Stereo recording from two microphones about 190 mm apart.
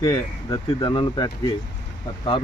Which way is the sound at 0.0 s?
20° left (ahead or behind).